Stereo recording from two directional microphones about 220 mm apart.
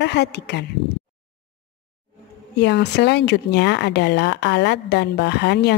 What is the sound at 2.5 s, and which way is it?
A woman's voice, 50° left (ahead or behind).